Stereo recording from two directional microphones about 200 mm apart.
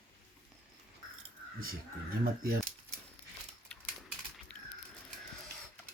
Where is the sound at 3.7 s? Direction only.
5° left (ahead or behind).